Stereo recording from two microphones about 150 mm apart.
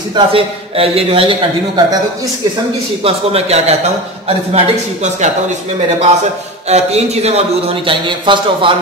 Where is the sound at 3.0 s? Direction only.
45° right (ahead or behind).